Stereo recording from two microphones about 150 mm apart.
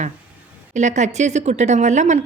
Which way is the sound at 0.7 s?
50° right (ahead or behind).